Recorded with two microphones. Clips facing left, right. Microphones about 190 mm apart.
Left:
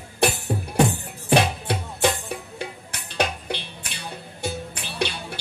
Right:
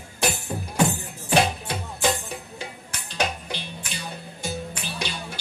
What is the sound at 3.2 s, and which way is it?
Music, 60° left (ahead or behind).